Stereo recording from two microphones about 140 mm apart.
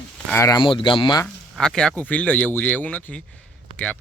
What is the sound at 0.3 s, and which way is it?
Speech, 20° left (ahead or behind).